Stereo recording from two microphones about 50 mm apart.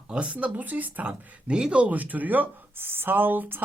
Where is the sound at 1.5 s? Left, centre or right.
Right.